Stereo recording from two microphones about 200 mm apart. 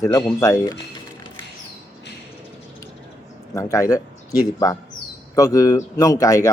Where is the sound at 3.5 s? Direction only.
15° left (ahead or behind).